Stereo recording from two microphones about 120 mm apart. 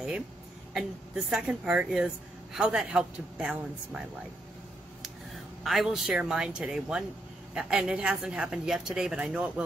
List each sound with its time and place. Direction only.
0.7 s a woman's voice: 5° right (ahead or behind)